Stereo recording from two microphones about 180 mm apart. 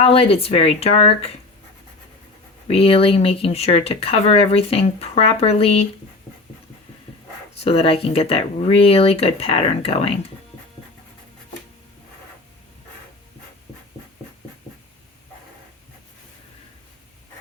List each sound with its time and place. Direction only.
0.0 s speech: 30° left (ahead or behind)
2.6 s speech: 30° left (ahead or behind)
7.5 s speech: 35° left (ahead or behind)